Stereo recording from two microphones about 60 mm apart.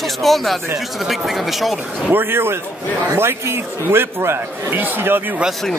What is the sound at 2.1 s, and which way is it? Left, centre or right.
A man's voice, right.